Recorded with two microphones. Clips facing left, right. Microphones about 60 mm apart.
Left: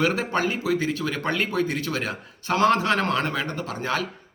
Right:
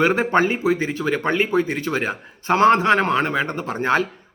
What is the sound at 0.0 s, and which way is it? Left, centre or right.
Speech, right.